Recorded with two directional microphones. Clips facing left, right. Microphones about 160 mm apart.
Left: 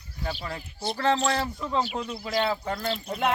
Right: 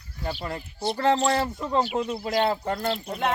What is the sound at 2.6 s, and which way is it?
Speech, 40° right (ahead or behind).